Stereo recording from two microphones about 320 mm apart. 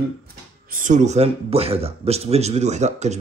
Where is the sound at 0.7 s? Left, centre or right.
Right.